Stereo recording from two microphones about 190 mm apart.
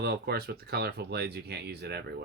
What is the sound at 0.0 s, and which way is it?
Speech, 60° right (ahead or behind).